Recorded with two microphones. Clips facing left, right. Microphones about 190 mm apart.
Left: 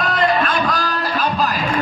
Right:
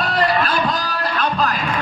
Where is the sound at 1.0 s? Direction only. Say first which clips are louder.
Right 1 dB; 10° left (ahead or behind).